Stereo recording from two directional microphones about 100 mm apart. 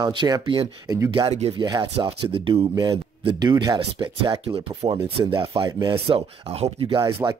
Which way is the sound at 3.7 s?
60° right (ahead or behind).